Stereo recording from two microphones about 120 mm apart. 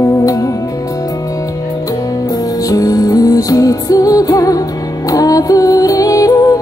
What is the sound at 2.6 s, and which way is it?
Music, 30° left (ahead or behind).